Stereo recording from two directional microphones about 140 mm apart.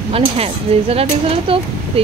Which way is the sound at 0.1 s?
45° right (ahead or behind).